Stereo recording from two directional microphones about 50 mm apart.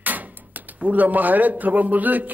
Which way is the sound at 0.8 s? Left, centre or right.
Right.